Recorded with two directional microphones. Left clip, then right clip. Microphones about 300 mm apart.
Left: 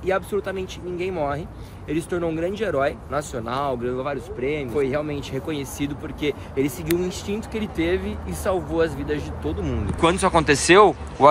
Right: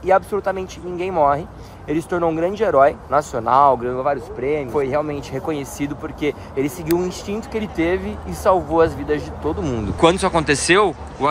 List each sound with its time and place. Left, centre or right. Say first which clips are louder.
0.0 s speech: right 7 dB; centre
9.6 s speech: right 5 dB; right
9.9 s speech: right 3 dB; centre